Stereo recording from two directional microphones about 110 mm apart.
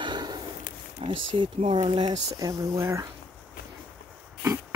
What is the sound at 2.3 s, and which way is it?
Speech, 30° right (ahead or behind).